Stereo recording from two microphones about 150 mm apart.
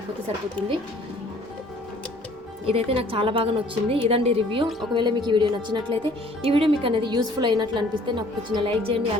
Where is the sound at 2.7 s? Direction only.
40° right (ahead or behind).